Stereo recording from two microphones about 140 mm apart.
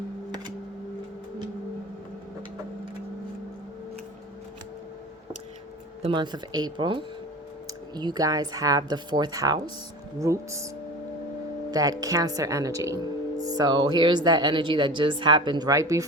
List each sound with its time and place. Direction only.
0.3 s a sound: 30° right (ahead or behind)
6.0 s a woman's voice: 35° right (ahead or behind)
11.7 s a woman's voice: 25° right (ahead or behind)